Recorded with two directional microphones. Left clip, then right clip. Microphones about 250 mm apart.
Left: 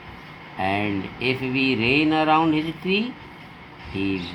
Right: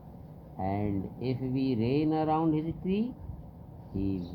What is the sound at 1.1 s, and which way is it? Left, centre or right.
Speech, centre.